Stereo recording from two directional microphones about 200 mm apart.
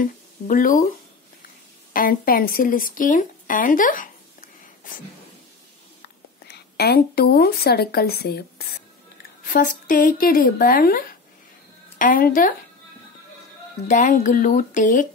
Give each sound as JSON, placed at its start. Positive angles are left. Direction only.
{"t": 0.0, "sound": "speech", "side_deg": 45}
{"t": 2.0, "sound": "speech", "side_deg": 45}
{"t": 6.0, "sound": "a woman's voice", "side_deg": 55}
{"t": 9.5, "sound": "speech", "side_deg": 40}
{"t": 13.8, "sound": "speech", "side_deg": 40}